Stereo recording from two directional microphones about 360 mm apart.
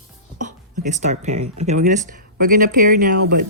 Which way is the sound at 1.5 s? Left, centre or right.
Centre.